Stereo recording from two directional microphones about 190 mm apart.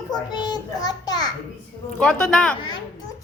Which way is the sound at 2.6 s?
25° left (ahead or behind).